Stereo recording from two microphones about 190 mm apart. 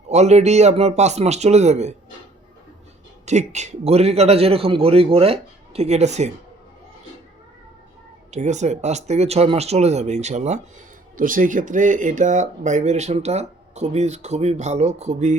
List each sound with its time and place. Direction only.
0.1 s speech: 35° right (ahead or behind)
3.2 s speech: 35° right (ahead or behind)
8.3 s speech: 35° right (ahead or behind)